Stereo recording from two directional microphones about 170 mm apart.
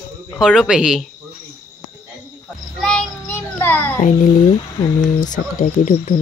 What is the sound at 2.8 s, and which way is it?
Child singing, 10° left (ahead or behind).